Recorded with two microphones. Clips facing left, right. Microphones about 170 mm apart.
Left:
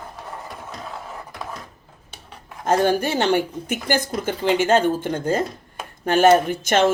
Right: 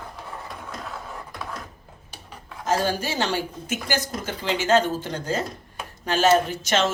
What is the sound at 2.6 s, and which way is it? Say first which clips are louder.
A woman's voice: left 5 dB; 55° left (ahead or behind).